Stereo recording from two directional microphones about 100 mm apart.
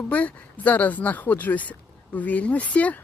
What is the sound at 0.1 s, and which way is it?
Speech, 15° left (ahead or behind).